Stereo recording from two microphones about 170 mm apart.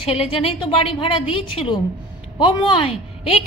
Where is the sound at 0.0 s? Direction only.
35° left (ahead or behind).